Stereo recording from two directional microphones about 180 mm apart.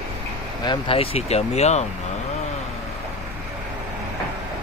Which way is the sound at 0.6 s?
30° left (ahead or behind).